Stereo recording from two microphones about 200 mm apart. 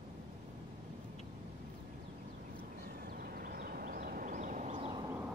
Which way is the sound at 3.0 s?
50° right (ahead or behind).